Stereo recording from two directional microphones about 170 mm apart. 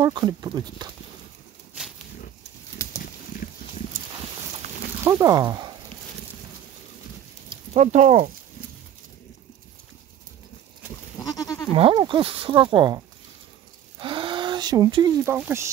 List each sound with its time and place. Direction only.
0.0 s speech: 25° right (ahead or behind)
3.4 s pig: 55° left (ahead or behind)
5.0 s speech: 20° right (ahead or behind)
7.7 s speech: 45° right (ahead or behind)
11.1 s goat: 20° left (ahead or behind)
11.7 s speech: 30° right (ahead or behind)
13.9 s a sound: 30° right (ahead or behind)
15.3 s speech: 15° right (ahead or behind)